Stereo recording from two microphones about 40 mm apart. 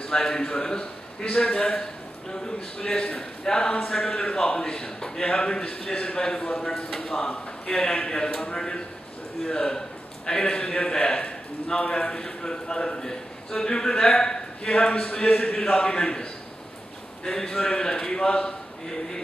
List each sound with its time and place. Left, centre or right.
0.1 s a man's voice: centre